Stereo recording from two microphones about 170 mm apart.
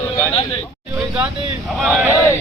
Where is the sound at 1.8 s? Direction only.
5° right (ahead or behind).